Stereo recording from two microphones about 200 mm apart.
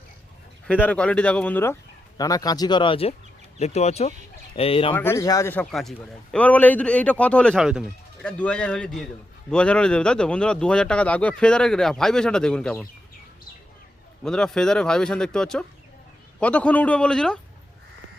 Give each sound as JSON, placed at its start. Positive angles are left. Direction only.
{"t": 0.7, "sound": "speech", "side_deg": 5}
{"t": 4.9, "sound": "speech", "side_deg": 15}
{"t": 14.3, "sound": "speech", "side_deg": 5}